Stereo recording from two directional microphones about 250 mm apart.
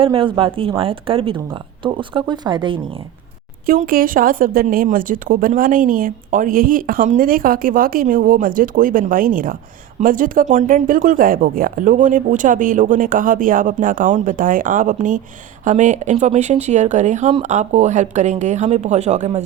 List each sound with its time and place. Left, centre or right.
0.0 s speech: right
3.7 s speech: right